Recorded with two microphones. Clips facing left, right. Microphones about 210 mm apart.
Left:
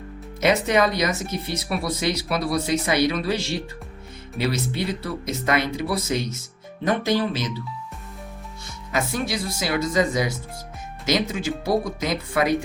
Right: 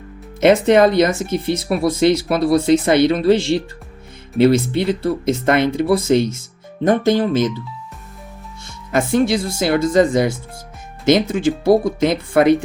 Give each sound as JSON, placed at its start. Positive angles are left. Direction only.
{"t": 0.3, "sound": "speech", "side_deg": -55}
{"t": 4.4, "sound": "speech", "side_deg": -55}
{"t": 9.2, "sound": "speech", "side_deg": -50}